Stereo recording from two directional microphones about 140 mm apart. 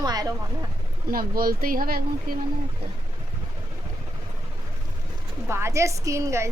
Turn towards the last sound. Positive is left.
turn(degrees=-20)  # may be behind; listen again after turning